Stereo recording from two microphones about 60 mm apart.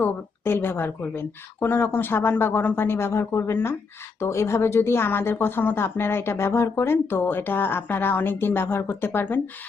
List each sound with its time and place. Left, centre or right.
0.0 s a woman's voice: left